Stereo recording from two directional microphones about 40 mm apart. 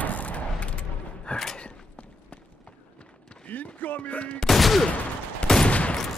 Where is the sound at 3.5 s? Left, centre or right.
Left.